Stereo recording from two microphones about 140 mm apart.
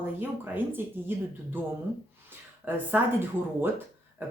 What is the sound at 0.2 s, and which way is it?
Speech, 15° right (ahead or behind).